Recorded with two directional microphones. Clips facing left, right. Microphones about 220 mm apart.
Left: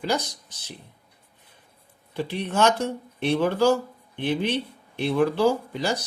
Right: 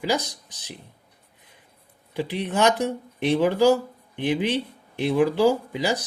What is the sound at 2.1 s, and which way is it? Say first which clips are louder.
Speech: right 1 dB; 15° right (ahead or behind).